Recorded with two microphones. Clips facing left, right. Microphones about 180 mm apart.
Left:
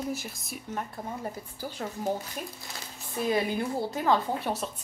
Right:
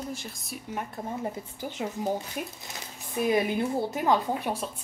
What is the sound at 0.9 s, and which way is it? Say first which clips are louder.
A woman's voice: right 3 dB; 20° right (ahead or behind).